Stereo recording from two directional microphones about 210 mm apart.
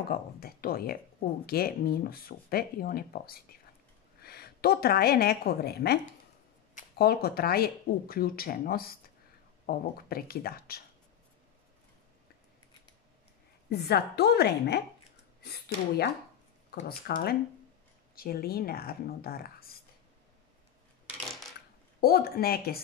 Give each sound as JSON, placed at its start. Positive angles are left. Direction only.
{"t": 0.1, "sound": "a woman's voice", "side_deg": 45}
{"t": 13.7, "sound": "speech", "side_deg": 50}
{"t": 22.0, "sound": "speech", "side_deg": 45}